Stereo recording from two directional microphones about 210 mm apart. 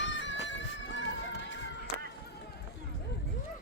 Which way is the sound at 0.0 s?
60° left (ahead or behind).